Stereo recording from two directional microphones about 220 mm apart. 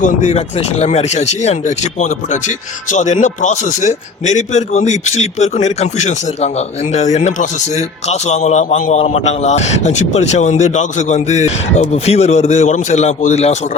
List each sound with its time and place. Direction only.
0.0 s speech: 35° left (ahead or behind)